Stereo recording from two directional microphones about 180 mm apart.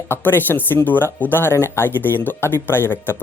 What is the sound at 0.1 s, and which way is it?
Speech, 10° left (ahead or behind).